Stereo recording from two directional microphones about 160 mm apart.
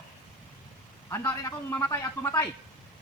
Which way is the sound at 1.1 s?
15° left (ahead or behind).